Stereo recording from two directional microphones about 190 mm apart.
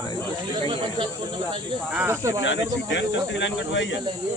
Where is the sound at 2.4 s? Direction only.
70° left (ahead or behind).